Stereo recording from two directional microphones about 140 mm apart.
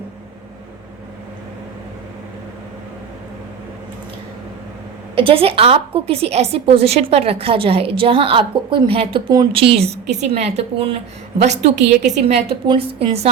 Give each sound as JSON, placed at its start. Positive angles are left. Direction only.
{"t": 5.1, "sound": "a woman's voice", "side_deg": -40}
{"t": 12.6, "sound": "a woman's voice", "side_deg": -35}